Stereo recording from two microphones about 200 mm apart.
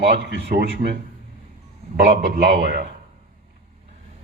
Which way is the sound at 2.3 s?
50° right (ahead or behind).